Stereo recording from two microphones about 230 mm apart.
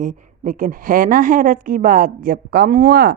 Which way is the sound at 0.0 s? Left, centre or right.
Right.